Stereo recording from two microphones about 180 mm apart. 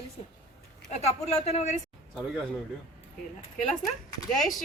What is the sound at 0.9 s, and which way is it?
Speech, 35° left (ahead or behind).